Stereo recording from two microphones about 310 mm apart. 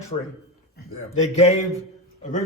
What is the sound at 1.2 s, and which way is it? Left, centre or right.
Speech, left.